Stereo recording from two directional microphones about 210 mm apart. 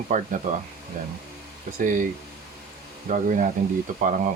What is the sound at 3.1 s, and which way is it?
Speech, 40° right (ahead or behind).